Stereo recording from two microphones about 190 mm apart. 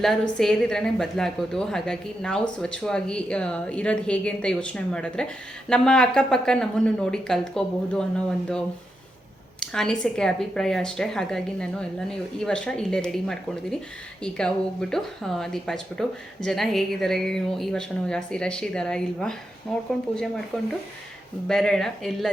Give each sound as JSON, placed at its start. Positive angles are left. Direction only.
{"t": 0.0, "sound": "speech", "side_deg": 0}
{"t": 9.6, "sound": "speech", "side_deg": 5}
{"t": 20.5, "sound": "speech", "side_deg": 5}